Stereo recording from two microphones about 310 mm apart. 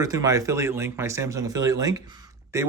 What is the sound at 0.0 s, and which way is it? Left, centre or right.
Speech, centre.